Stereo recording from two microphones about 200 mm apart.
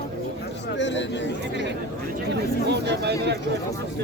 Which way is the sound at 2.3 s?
55° right (ahead or behind).